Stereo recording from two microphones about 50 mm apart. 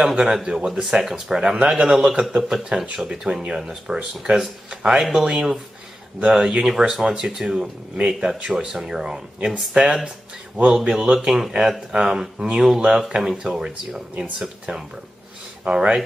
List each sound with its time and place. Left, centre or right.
0.0 s speech: centre